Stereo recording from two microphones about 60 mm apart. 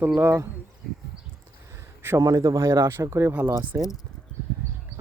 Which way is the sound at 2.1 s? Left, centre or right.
Right.